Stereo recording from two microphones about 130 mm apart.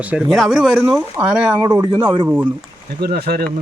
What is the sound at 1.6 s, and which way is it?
Speech, 30° right (ahead or behind).